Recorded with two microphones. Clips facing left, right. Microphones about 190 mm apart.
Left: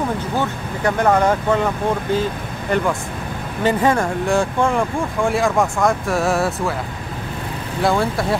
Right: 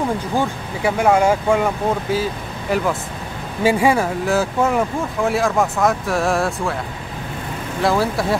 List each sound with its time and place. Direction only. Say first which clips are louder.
0.4 s speech: right 1 dB; 10° right (ahead or behind)
7.8 s speech: even; centre (ahead or behind)